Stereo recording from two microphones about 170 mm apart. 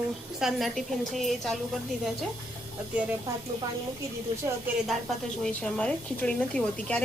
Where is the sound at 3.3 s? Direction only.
20° right (ahead or behind).